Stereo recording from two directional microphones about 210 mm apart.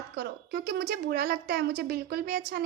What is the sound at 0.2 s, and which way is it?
A woman's voice, 50° right (ahead or behind).